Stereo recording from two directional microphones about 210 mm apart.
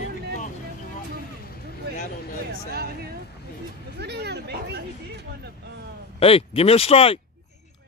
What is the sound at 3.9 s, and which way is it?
Chatter, 50° right (ahead or behind).